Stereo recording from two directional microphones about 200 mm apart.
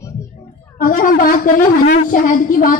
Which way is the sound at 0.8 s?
45° left (ahead or behind).